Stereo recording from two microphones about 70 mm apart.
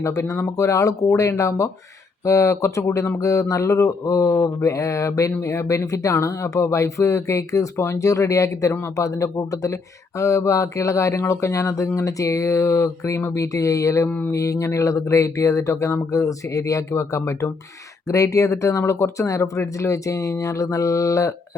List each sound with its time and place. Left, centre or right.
0.0 s speech: left
4.6 s speech: left
14.1 s a sound: left
14.3 s speech: left